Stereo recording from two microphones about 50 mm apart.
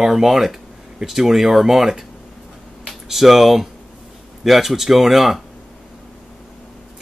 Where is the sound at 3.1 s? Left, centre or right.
Centre.